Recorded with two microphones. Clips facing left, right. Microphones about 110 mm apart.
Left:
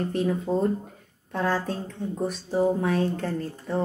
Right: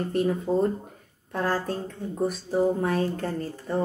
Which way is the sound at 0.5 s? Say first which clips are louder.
Even; 10° right (ahead or behind).